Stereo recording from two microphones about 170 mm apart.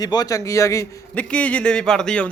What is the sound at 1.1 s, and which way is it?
A man's voice, 5° left (ahead or behind).